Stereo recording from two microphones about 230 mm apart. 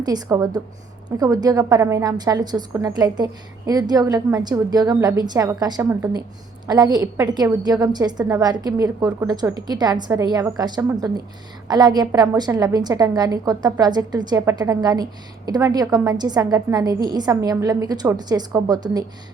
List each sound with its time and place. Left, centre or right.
0.0 s a woman's voice: centre